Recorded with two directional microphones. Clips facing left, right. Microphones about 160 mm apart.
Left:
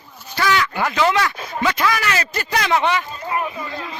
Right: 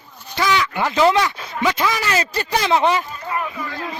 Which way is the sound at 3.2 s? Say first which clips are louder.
Left 1 dB; 20° left (ahead or behind).